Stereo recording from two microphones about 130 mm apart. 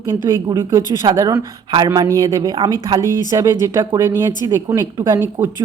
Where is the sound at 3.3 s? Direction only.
20° right (ahead or behind).